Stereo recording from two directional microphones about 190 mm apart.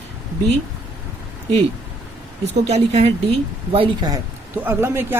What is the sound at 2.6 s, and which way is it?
Speech, 35° right (ahead or behind).